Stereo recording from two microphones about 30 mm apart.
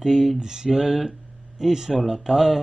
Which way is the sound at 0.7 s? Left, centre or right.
Centre.